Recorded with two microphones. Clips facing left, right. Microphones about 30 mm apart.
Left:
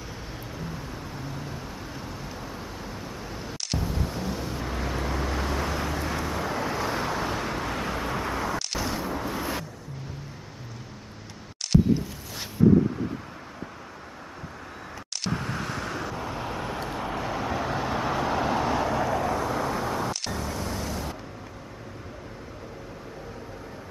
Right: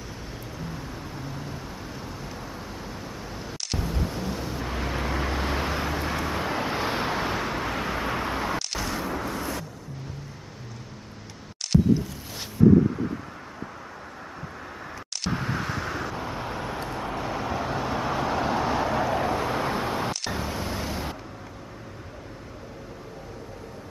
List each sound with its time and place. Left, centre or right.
0.6 s vehicle: centre
8.5 s a sound: centre
15.2 s vehicle: centre